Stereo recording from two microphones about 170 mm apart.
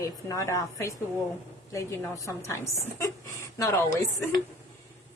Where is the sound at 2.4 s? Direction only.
15° left (ahead or behind).